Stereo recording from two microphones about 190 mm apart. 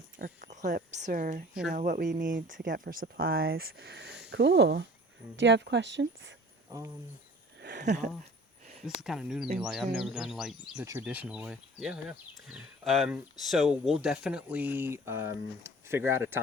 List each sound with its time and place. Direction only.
0.2 s speech: 40° right (ahead or behind); by 6.3 s 70° right (ahead or behind)
6.7 s speech: 15° right (ahead or behind)
7.6 s a sound: 60° right (ahead or behind)
9.0 s speech: centre (ahead or behind)